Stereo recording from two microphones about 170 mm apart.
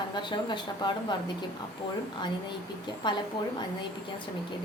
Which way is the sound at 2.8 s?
25° left (ahead or behind).